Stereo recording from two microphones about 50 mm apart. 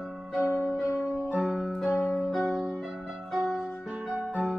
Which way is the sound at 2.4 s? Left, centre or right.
Centre.